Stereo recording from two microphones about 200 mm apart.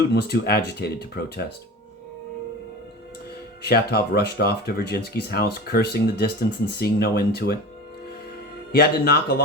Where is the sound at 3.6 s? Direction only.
55° left (ahead or behind).